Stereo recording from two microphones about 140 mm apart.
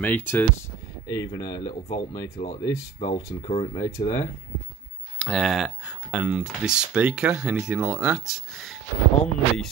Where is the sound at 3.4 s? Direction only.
45° left (ahead or behind).